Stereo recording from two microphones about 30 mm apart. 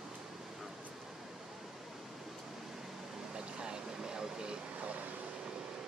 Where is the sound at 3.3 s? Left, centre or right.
Right.